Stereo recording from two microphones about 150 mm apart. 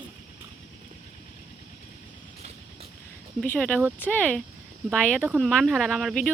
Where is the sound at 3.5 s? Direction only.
10° left (ahead or behind).